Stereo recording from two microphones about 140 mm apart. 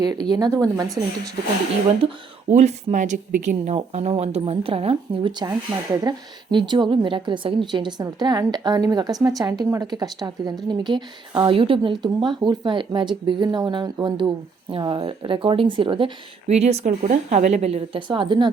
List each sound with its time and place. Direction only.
0.0 s speech: 30° right (ahead or behind)
2.5 s speech: 55° right (ahead or behind); by 16.1 s 35° right (ahead or behind)
16.5 s speech: 50° right (ahead or behind)